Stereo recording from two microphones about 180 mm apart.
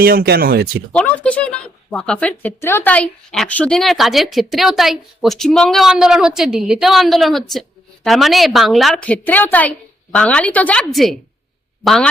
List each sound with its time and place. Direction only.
0.0 s speech: 60° right (ahead or behind)
0.9 s a woman's voice: 5° left (ahead or behind)